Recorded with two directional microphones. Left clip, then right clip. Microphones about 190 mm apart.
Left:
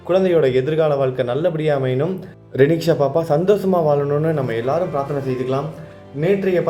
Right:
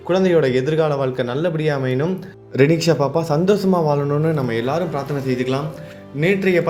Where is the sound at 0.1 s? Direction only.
25° right (ahead or behind).